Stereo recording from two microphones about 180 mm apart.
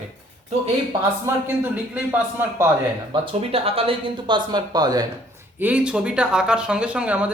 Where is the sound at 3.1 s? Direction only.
30° right (ahead or behind).